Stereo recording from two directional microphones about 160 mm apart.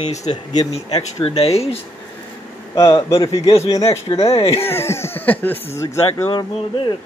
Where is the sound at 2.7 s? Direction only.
20° left (ahead or behind).